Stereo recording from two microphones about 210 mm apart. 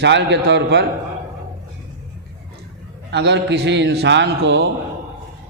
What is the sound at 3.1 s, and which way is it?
A man's voice, 55° right (ahead or behind).